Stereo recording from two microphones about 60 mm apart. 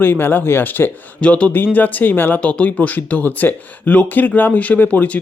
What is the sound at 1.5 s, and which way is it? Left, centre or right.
Speech, left.